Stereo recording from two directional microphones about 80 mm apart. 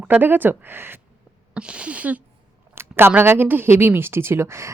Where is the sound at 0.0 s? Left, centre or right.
Right.